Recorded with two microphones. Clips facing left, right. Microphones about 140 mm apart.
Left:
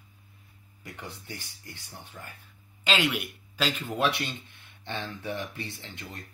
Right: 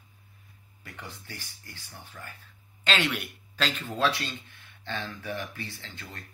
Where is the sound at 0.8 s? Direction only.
15° left (ahead or behind).